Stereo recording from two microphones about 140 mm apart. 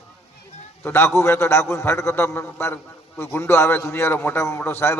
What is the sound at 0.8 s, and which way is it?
A man's voice, 20° left (ahead or behind).